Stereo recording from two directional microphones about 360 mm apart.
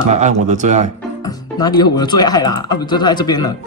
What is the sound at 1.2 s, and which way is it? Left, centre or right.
Speech, centre.